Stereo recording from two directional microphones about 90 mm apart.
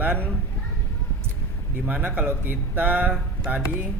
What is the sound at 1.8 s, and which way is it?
Speech, 20° right (ahead or behind).